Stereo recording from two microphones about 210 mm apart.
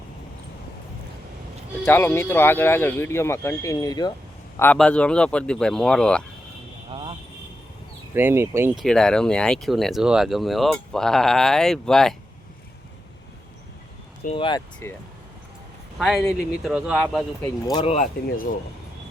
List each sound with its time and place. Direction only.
1.8 s speech: 10° left (ahead or behind)
4.5 s speech: 10° left (ahead or behind)
6.9 s vehicle: 25° right (ahead or behind)
8.1 s speech: 10° right (ahead or behind)
8.7 s speech: centre (ahead or behind)
14.3 s speech: 25° left (ahead or behind)
14.8 s speech: 10° left (ahead or behind)
16.0 s speech: centre (ahead or behind)
17.7 s speech: 20° left (ahead or behind)
17.9 s speech: 40° left (ahead or behind)